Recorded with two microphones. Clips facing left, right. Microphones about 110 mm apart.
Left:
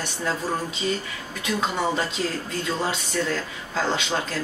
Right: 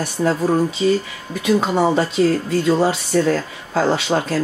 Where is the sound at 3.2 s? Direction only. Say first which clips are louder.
Right 9 dB; 45° right (ahead or behind).